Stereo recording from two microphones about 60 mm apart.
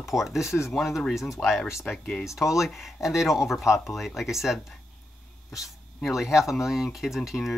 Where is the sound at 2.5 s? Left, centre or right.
Centre.